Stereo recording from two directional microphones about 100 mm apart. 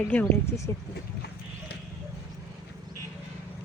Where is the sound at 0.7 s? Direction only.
25° left (ahead or behind).